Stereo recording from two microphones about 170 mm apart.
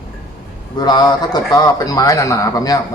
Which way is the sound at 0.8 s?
25° left (ahead or behind).